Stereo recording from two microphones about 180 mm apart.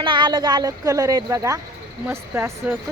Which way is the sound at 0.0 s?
25° right (ahead or behind).